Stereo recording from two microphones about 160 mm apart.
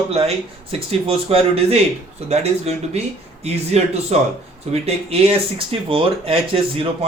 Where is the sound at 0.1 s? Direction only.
40° right (ahead or behind).